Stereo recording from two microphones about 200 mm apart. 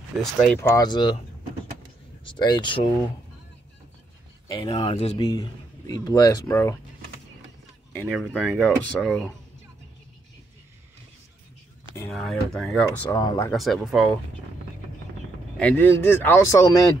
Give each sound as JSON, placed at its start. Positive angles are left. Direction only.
{"t": 0.2, "sound": "speech", "side_deg": 0}
{"t": 0.6, "sound": "speech", "side_deg": 15}
{"t": 2.2, "sound": "speech", "side_deg": 20}
{"t": 4.5, "sound": "speech", "side_deg": 25}
{"t": 8.0, "sound": "speech", "side_deg": 5}
{"t": 12.1, "sound": "speech", "side_deg": 0}
{"t": 13.2, "sound": "speech", "side_deg": 20}
{"t": 13.5, "sound": "speech", "side_deg": 0}
{"t": 15.5, "sound": "speech", "side_deg": 5}